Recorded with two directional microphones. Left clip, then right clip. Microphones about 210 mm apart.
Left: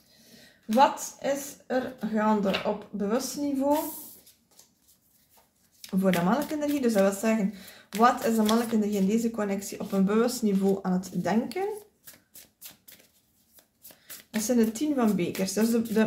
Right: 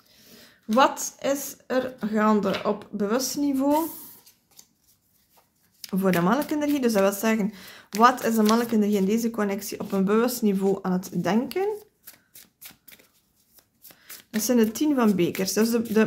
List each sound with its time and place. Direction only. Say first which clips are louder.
0.4 s a woman's voice: right 1 dB; 50° right (ahead or behind)
5.8 s a sound: right 2 dB; 40° right (ahead or behind)
6.2 s a woman's voice: right 3 dB; 40° right (ahead or behind)
14.3 s speech: right 3 dB; 40° right (ahead or behind)